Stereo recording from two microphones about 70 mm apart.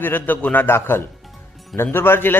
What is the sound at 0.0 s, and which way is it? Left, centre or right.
A man's voice, left.